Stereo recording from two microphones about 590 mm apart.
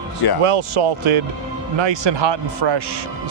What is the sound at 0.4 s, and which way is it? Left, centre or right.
A man's voice, right.